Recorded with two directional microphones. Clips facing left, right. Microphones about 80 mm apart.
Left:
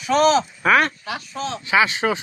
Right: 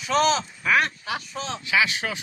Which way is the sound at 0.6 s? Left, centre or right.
Left.